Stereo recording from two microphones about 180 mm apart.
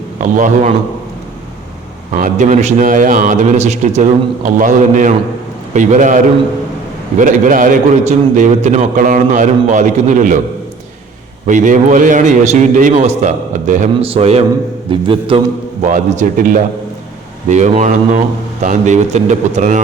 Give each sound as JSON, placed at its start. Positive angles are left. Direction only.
{"t": 0.2, "sound": "a man's voice", "side_deg": -45}
{"t": 2.1, "sound": "a man's voice", "side_deg": -45}
{"t": 11.4, "sound": "a man's voice", "side_deg": -45}
{"t": 15.8, "sound": "a man's voice", "side_deg": -45}